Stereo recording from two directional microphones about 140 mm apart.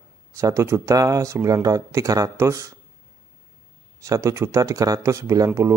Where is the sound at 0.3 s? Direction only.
20° right (ahead or behind).